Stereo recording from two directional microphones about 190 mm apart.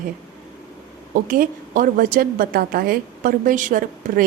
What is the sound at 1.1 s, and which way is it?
A woman's voice, 45° right (ahead or behind).